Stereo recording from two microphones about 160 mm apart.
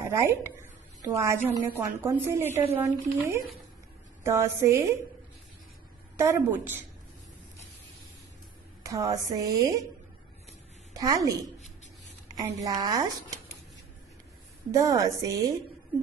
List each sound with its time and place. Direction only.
0.1 s a woman's voice: 15° right (ahead or behind)
6.1 s a woman's voice: 20° right (ahead or behind)
8.8 s a woman's voice: 20° right (ahead or behind)
10.9 s a woman's voice: 20° right (ahead or behind)
12.4 s a woman's voice: 20° right (ahead or behind)
14.7 s a woman's voice: 20° right (ahead or behind)